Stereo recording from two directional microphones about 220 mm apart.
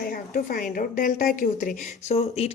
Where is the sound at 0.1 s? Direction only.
40° left (ahead or behind).